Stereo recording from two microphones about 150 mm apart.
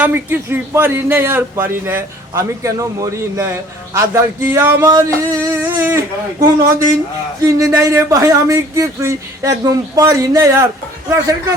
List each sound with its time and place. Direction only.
0.0 s speech: 15° right (ahead or behind)
4.9 s a sound: 25° right (ahead or behind)
7.4 s speech: 20° right (ahead or behind)